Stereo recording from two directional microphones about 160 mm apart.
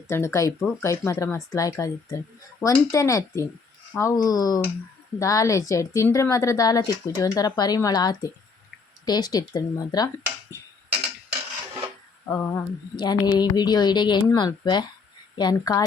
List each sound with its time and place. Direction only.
0.1 s a woman's voice: 15° left (ahead or behind)
10.5 s a sound: 15° left (ahead or behind)
12.3 s a woman's voice: 20° left (ahead or behind)